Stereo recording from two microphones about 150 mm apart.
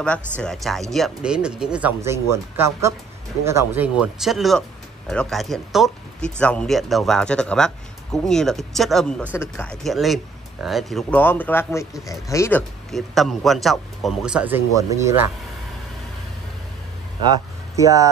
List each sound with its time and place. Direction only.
0.4 s speech: 5° left (ahead or behind); by 3.9 s 15° right (ahead or behind)
4.0 s speech: centre (ahead or behind)
9.3 s speech: 15° left (ahead or behind)
9.8 s speech: centre (ahead or behind); by 12.6 s 15° left (ahead or behind)
12.9 s speech: centre (ahead or behind)
14.8 s speech: 20° right (ahead or behind)
17.3 s speech: 20° right (ahead or behind)